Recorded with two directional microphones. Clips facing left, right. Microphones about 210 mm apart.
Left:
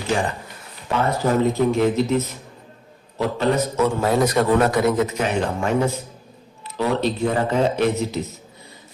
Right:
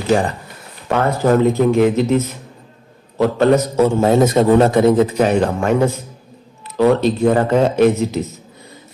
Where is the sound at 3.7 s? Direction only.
25° right (ahead or behind).